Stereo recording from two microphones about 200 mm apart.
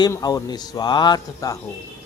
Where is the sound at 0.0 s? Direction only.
20° left (ahead or behind).